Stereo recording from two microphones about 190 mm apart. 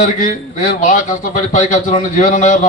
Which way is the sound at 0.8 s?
45° left (ahead or behind).